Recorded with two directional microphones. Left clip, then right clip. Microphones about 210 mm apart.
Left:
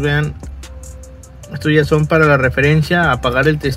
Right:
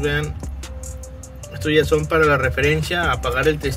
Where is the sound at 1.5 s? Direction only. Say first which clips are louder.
Left 3 dB; 50° left (ahead or behind).